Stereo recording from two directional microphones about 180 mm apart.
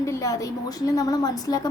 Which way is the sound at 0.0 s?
15° left (ahead or behind).